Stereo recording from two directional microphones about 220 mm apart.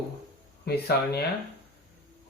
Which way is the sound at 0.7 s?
45° left (ahead or behind).